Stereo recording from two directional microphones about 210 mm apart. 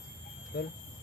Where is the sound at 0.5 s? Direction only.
55° left (ahead or behind).